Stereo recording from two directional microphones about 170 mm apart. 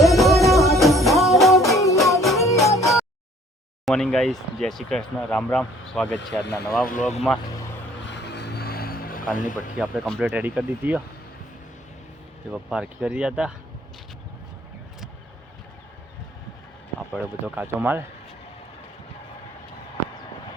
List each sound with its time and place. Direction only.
0.0 s music: centre (ahead or behind)
3.8 s speech: 5° left (ahead or behind)
6.4 s speech: 75° left (ahead or behind)
6.8 s speech: 50° left (ahead or behind)
8.0 s a sound: 90° left; by 9.6 s 50° left (ahead or behind)
9.7 s speech: 5° right (ahead or behind)
12.5 s speech: 5° right (ahead or behind)
17.2 s speech: 10° right (ahead or behind)